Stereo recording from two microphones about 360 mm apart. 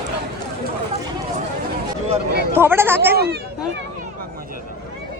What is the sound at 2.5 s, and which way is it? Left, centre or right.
Speech, centre.